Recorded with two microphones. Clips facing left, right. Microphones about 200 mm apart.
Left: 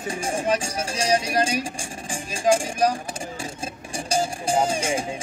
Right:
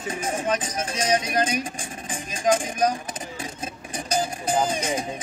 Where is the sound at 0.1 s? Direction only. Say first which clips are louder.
Left 2 dB; 30° left (ahead or behind).